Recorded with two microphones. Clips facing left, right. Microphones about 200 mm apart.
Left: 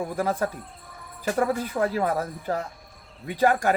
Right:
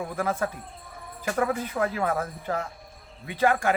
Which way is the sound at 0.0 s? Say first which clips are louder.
Left 2 dB; 35° left (ahead or behind).